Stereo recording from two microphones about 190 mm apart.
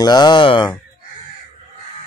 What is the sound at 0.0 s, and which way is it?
Speech, 20° left (ahead or behind).